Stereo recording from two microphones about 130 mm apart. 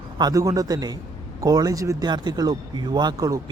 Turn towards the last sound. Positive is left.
turn(degrees=-25)  # may be behind; listen again after turning